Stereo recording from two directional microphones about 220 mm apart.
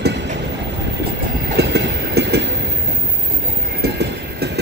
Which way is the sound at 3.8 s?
45° right (ahead or behind).